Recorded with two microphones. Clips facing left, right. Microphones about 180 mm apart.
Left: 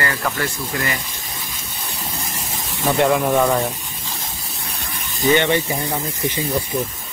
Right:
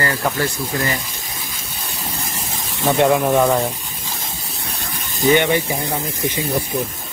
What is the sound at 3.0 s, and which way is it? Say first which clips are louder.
Speech: right 2 dB; 20° right (ahead or behind).